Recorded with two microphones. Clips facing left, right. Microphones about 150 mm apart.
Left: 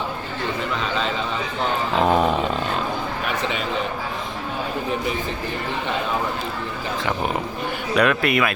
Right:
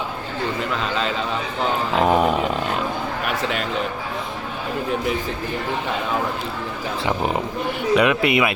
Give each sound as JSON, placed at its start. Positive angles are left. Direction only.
{"t": 0.8, "sound": "a man's voice", "side_deg": 0}
{"t": 2.0, "sound": "a sound", "side_deg": -5}
{"t": 7.9, "sound": "a man's voice", "side_deg": -15}